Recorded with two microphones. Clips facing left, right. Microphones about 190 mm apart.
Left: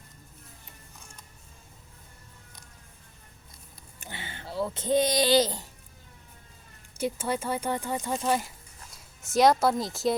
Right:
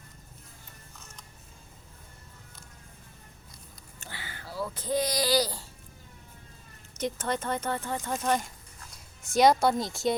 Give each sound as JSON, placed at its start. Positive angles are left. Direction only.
{"t": 0.9, "sound": "music", "side_deg": 10}
{"t": 4.0, "sound": "a sound", "side_deg": 20}
{"t": 6.9, "sound": "speech", "side_deg": 10}